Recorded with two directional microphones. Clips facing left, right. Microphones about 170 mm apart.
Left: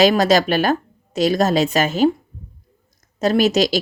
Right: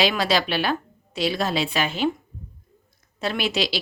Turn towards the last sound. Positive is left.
turn(degrees=45)  # may be behind; listen again after turning